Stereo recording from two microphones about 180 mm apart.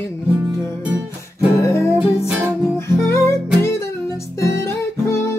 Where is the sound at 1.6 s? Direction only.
15° left (ahead or behind).